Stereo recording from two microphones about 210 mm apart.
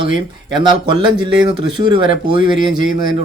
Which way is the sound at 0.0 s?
20° right (ahead or behind).